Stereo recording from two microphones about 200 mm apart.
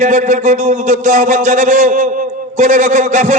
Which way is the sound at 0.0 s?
40° right (ahead or behind).